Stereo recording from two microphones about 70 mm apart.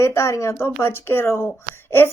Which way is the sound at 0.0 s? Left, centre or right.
Left.